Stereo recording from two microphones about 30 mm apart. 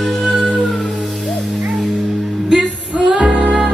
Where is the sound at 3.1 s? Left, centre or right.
Right.